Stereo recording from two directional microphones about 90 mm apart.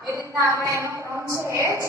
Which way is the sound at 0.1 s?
30° right (ahead or behind).